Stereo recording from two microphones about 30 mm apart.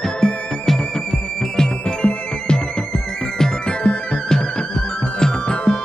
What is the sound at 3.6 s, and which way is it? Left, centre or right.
Music, left.